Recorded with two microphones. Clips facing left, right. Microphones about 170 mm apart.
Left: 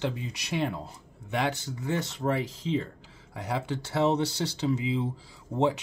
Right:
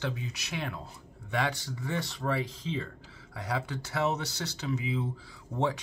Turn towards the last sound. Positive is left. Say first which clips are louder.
# left 4 dB
turn(degrees=25)  # may be behind; listen again after turning